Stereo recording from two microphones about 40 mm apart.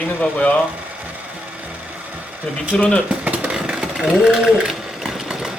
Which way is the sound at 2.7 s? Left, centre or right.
Left.